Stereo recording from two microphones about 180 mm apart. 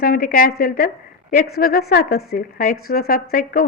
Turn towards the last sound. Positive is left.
turn(degrees=55)  # may be behind; listen again after turning